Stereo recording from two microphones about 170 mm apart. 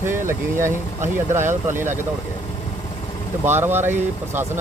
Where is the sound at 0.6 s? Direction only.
45° right (ahead or behind).